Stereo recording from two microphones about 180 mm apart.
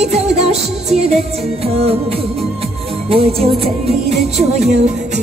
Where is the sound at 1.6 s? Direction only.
35° right (ahead or behind).